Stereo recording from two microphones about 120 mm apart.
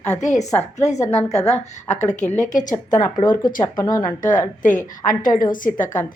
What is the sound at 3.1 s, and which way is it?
Speech, 40° left (ahead or behind).